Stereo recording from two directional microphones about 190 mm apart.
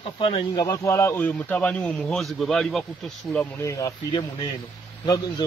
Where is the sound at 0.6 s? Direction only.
15° left (ahead or behind); by 3.4 s centre (ahead or behind).